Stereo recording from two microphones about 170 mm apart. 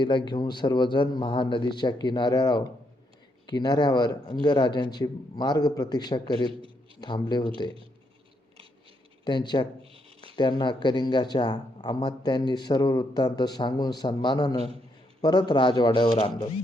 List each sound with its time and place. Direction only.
0.0 s speech: 30° left (ahead or behind)
9.2 s speech: 25° left (ahead or behind)